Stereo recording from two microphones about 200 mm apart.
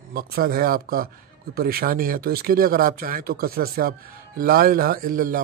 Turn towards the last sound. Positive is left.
turn(degrees=-45)  # may be behind; listen again after turning